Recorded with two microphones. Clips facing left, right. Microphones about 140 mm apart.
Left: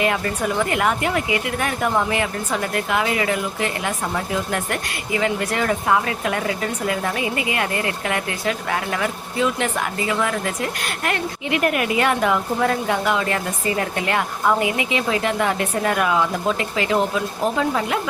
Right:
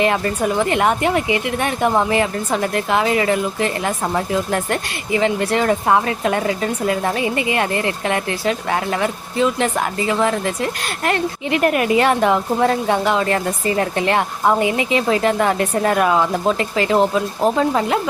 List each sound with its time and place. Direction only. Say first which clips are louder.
0.0 s a woman's voice: right 4 dB; 30° right (ahead or behind)